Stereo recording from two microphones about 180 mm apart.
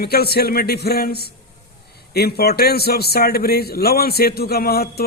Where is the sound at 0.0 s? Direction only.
60° left (ahead or behind).